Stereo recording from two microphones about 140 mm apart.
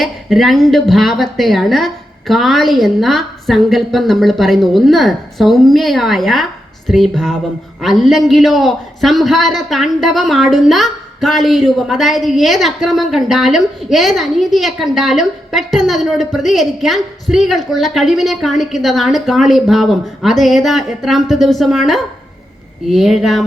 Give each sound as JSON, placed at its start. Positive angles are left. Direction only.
{"t": 0.0, "sound": "a man's voice", "side_deg": 0}